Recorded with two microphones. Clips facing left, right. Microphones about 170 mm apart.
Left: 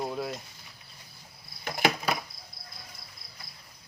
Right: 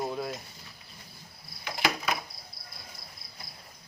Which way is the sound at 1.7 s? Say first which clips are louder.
Left 2 dB; 45° left (ahead or behind).